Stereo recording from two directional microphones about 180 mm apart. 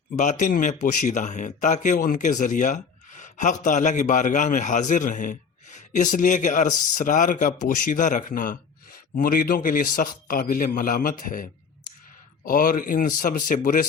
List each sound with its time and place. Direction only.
0.2 s speech: 45° left (ahead or behind)
12.5 s speech: 50° left (ahead or behind)